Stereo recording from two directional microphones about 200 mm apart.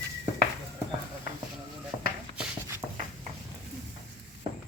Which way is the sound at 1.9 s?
20° right (ahead or behind).